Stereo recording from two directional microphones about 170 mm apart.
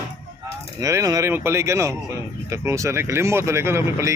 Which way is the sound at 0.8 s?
20° right (ahead or behind).